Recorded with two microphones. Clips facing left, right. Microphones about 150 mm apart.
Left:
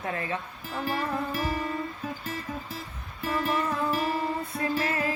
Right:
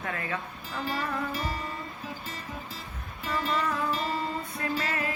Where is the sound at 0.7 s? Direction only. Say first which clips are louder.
Left 2 dB; 50° left (ahead or behind).